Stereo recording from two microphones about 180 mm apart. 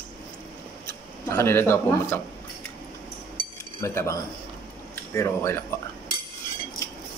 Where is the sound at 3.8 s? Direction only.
15° left (ahead or behind).